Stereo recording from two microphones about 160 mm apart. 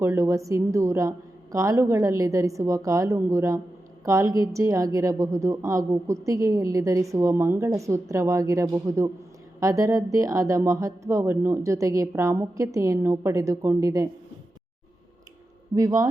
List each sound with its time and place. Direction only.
0.0 s a woman's voice: 20° right (ahead or behind)
15.7 s a woman's voice: 20° right (ahead or behind)